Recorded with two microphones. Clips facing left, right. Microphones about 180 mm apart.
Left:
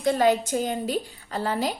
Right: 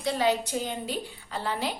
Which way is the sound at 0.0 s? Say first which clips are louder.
Left 5 dB; 50° left (ahead or behind).